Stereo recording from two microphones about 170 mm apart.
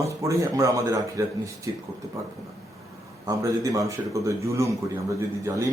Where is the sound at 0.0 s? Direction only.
20° right (ahead or behind).